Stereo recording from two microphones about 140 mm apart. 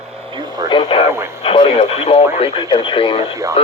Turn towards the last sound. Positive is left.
turn(degrees=45)  # may be behind; listen again after turning